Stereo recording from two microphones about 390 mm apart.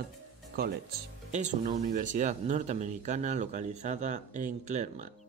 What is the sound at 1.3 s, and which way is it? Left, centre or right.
Speech, centre.